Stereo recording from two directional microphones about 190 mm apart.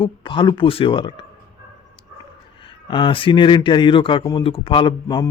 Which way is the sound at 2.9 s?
25° left (ahead or behind).